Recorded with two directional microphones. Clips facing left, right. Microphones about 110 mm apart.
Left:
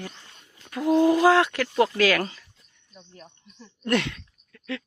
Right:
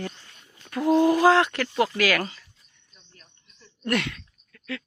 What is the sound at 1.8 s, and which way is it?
Speech, 25° left (ahead or behind).